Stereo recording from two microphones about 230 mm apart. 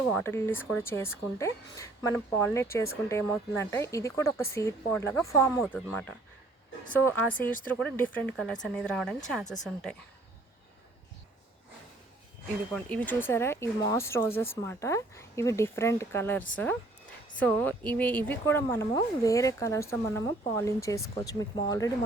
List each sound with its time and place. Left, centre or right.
0.1 s speech: centre
12.7 s speech: centre
17.4 s speech: centre